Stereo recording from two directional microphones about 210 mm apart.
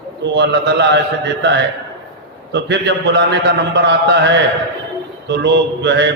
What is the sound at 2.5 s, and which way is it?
A man's voice, 55° right (ahead or behind).